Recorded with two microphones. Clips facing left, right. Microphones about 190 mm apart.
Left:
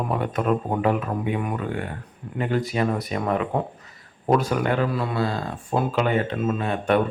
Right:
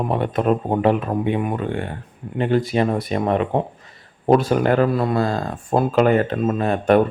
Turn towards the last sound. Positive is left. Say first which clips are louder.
# right 5 dB
turn(degrees=-40)  # may be behind; listen again after turning